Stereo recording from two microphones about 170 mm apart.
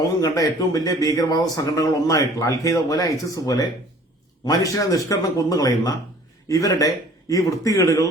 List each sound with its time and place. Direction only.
0.0 s a man's voice: 20° left (ahead or behind)